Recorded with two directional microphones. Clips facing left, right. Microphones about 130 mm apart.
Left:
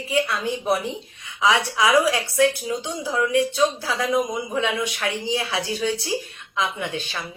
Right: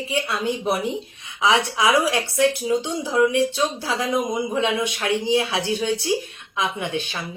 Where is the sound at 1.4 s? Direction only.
20° right (ahead or behind).